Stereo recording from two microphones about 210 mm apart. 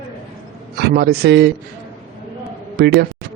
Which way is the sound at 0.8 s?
50° right (ahead or behind).